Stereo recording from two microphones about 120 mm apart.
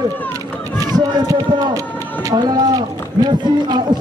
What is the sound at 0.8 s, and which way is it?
Run, 35° right (ahead or behind).